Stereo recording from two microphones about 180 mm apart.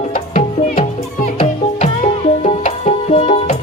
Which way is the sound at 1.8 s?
40° left (ahead or behind).